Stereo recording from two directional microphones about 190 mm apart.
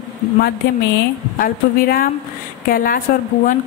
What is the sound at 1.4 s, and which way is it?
Speech, 50° left (ahead or behind).